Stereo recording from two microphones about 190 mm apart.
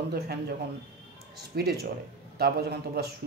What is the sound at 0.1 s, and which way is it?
Speech, 55° right (ahead or behind).